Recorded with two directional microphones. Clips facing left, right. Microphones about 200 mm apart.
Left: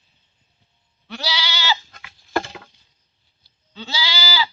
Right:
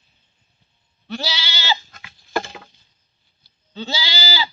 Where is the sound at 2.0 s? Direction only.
30° right (ahead or behind).